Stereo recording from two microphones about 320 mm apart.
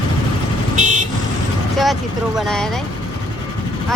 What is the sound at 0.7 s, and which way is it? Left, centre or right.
Vehicle, right.